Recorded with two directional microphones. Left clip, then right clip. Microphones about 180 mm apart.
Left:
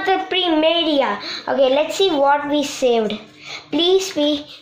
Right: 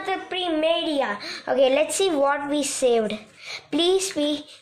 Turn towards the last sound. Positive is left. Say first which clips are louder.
# left 6 dB
turn(degrees=-10)  # may be behind; listen again after turning